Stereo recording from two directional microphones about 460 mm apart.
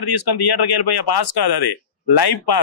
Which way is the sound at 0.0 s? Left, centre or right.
Left.